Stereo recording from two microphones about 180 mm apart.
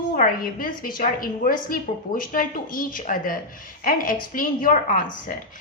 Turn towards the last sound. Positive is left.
turn(degrees=50)  # may be behind; listen again after turning